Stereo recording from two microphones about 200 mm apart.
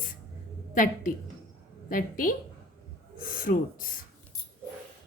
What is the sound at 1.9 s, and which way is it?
A woman's voice, 45° left (ahead or behind).